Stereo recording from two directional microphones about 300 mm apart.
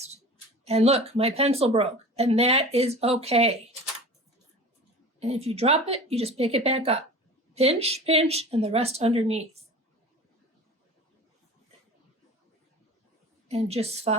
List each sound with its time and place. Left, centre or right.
0.6 s speech: right
5.2 s speech: right
13.5 s speech: right